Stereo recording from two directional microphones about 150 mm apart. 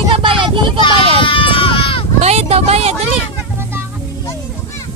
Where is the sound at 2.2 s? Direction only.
45° right (ahead or behind).